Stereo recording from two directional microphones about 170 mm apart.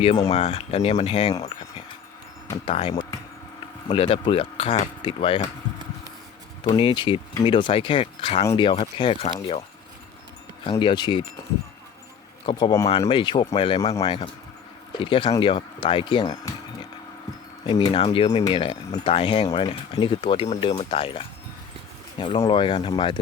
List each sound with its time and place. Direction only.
0.3 s speech: 35° left (ahead or behind)
2.6 s speech: 35° left (ahead or behind)
2.9 s a sound: 20° left (ahead or behind)
3.8 s speech: 35° left (ahead or behind)
6.7 s speech: 30° left (ahead or behind)
12.5 s speech: 25° left (ahead or behind)
17.7 s speech: 30° left (ahead or behind)